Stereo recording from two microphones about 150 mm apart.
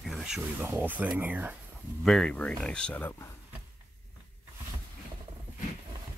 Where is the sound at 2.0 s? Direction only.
5° left (ahead or behind).